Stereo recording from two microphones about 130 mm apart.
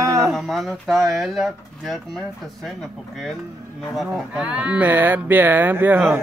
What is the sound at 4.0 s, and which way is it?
Speech, 10° right (ahead or behind).